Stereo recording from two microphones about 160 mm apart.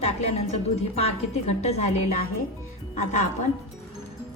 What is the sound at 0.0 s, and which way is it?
A woman's voice, 40° left (ahead or behind).